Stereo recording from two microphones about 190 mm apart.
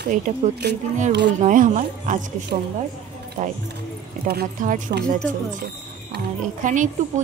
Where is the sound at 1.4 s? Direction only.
40° right (ahead or behind).